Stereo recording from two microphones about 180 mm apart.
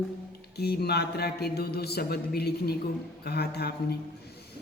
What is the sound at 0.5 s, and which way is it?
A woman's voice, 65° left (ahead or behind).